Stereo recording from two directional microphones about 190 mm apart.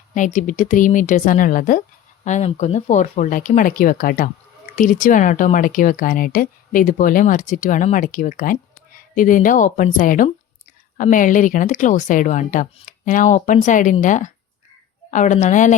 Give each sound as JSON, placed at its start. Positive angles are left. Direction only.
{"t": 0.1, "sound": "a woman's voice", "side_deg": 40}